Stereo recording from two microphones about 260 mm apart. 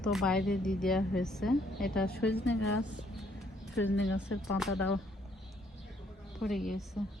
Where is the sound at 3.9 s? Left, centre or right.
Centre.